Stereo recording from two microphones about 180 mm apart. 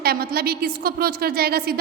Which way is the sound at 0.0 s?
55° right (ahead or behind).